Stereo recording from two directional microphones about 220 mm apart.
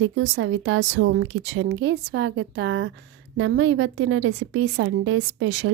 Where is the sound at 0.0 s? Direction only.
65° right (ahead or behind).